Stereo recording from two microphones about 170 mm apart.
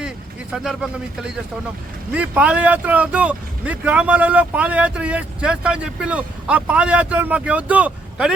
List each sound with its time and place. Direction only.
0.5 s speech: centre (ahead or behind)